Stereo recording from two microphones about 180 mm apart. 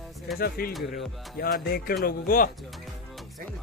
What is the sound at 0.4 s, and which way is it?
Speech, 55° left (ahead or behind).